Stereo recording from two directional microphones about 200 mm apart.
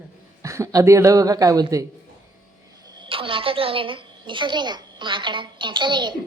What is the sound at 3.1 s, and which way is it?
A woman's voice, 25° right (ahead or behind).